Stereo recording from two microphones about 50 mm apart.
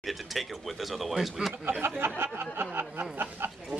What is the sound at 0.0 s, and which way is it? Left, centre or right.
Speech, centre.